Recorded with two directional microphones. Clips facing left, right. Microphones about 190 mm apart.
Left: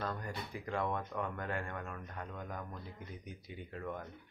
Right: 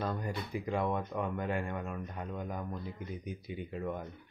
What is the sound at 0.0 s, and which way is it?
Speech, 15° right (ahead or behind).